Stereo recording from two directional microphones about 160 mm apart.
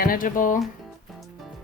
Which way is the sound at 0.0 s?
60° left (ahead or behind).